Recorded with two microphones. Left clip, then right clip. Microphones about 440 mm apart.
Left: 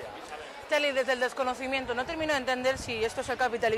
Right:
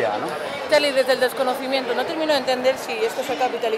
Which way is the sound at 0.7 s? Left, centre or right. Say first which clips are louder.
Right 9 dB; left.